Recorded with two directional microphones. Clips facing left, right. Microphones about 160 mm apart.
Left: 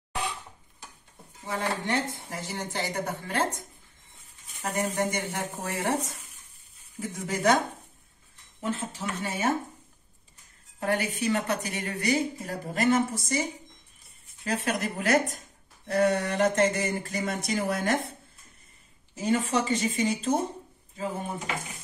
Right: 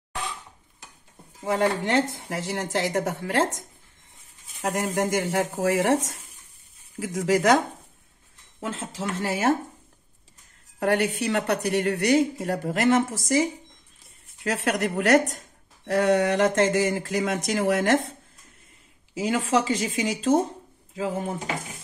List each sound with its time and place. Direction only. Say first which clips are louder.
1.4 s speech: right 7 dB; 85° right
7.0 s speech: right 8 dB; 90° right
8.5 s speech: even; 90° right
10.8 s a woman's voice: right 5 dB; 70° right (ahead or behind); by 13.4 s 90° right
14.4 s speech: right 4 dB; 80° right
15.9 s speech: right 4 dB; 90° right
19.1 s speech: right 3 dB; 90° right